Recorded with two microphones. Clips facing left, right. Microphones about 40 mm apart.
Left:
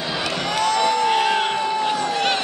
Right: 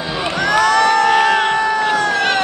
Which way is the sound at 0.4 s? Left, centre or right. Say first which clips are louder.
Right 8 dB; right.